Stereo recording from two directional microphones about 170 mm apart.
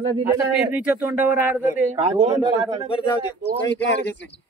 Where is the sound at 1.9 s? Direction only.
35° right (ahead or behind).